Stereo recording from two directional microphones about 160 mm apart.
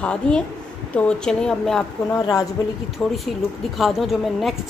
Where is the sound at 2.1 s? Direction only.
25° left (ahead or behind).